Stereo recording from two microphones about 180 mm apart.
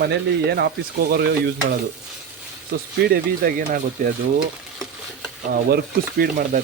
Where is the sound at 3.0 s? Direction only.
50° right (ahead or behind).